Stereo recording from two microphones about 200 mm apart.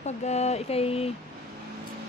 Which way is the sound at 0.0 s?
35° left (ahead or behind).